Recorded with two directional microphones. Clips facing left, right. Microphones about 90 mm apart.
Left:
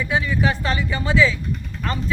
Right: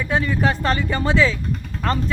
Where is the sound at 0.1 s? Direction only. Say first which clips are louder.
Right 2 dB; 45° right (ahead or behind).